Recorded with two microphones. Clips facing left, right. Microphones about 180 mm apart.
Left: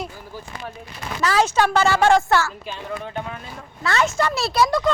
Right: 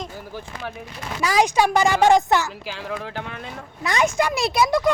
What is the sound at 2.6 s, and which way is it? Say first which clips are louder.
Speech: even; 90° right.